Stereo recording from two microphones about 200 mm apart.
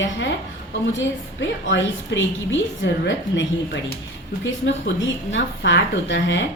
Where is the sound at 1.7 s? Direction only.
65° left (ahead or behind).